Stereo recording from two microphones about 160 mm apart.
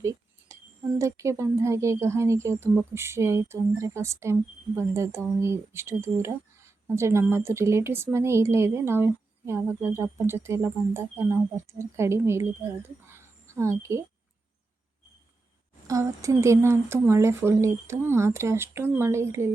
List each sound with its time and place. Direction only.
0.0 s speech: 20° right (ahead or behind)
13.1 s a sound: 15° right (ahead or behind)
15.9 s speech: 20° right (ahead or behind)